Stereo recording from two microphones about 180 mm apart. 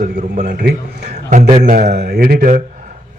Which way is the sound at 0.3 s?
60° right (ahead or behind).